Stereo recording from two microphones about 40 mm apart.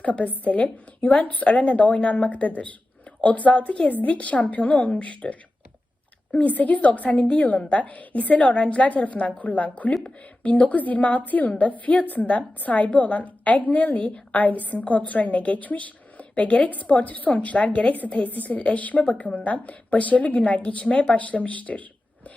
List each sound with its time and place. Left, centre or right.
0.0 s a woman's voice: left
7.2 s a woman's voice: left
7.8 s a woman's voice: left
19.4 s a woman's voice: left